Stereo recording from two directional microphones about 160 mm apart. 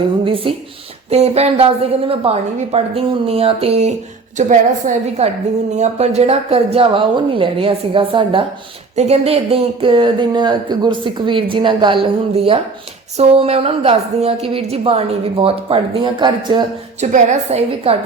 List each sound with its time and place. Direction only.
0.3 s a woman's voice: 35° right (ahead or behind)
17.0 s a woman's voice: 45° right (ahead or behind)